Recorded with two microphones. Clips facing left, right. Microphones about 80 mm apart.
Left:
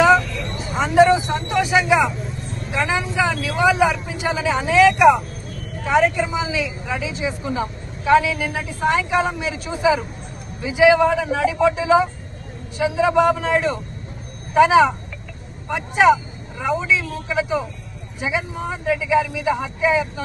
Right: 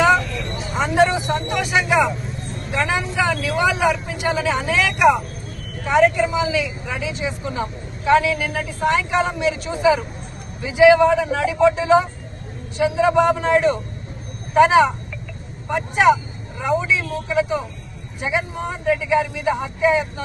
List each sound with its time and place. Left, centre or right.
0.7 s vehicle: centre
2.7 s speech: centre
4.9 s speech: centre
5.8 s speech: centre
16.6 s speech: centre
17.3 s speech: centre